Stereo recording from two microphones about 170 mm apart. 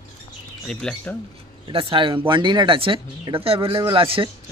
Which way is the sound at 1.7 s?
30° right (ahead or behind).